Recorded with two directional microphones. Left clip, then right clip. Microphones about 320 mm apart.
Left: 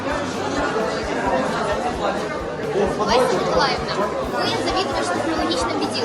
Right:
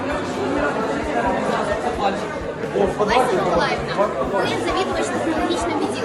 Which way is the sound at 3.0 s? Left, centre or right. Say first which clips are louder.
Left 1 dB; centre.